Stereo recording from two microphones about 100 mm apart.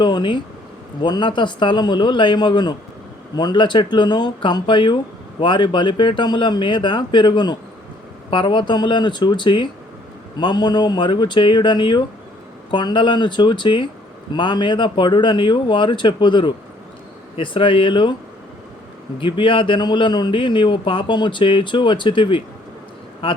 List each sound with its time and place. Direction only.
0.0 s a man's voice: 50° left (ahead or behind)
19.2 s a man's voice: 60° left (ahead or behind)